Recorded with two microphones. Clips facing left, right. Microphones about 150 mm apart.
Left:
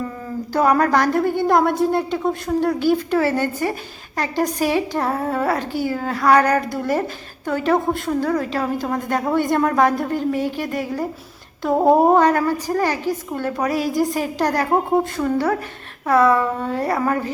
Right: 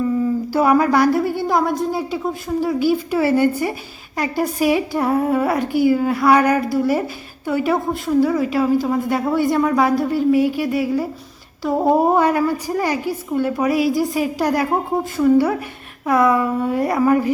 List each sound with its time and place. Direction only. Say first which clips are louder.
0.5 s a woman's voice: even; 10° right (ahead or behind)